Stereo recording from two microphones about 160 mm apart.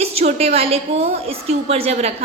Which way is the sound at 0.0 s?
40° right (ahead or behind).